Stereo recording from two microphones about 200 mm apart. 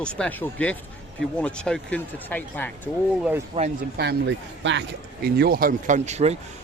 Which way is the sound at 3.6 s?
25° right (ahead or behind).